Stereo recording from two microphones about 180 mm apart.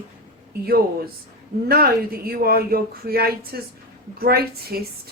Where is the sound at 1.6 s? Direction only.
55° right (ahead or behind).